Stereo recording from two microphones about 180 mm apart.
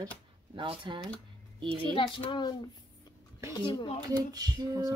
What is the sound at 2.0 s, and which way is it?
Speech, 30° left (ahead or behind).